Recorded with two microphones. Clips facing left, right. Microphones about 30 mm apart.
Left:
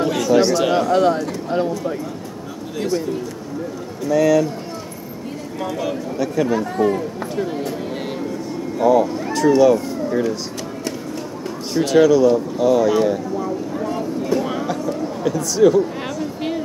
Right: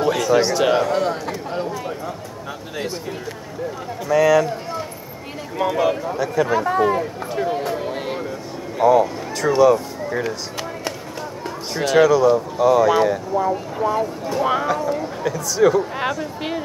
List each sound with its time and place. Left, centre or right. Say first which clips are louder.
0.0 s speech: left 1 dB; centre
2.8 s speech: left 7 dB; centre
4.0 s speech: even; centre
5.6 s speech: right 6 dB; centre
6.1 s speech: even; centre
6.6 s speech: right 1 dB; centre
10.0 s speech: left 5 dB; centre
11.7 s speech: left 1 dB; centre
15.2 s speech: left 2 dB; centre
16.0 s speech: right 1 dB; centre